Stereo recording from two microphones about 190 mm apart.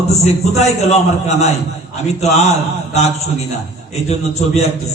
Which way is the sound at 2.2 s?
35° left (ahead or behind).